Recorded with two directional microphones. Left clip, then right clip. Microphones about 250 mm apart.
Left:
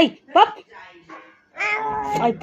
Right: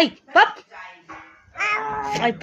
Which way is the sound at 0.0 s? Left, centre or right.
Centre.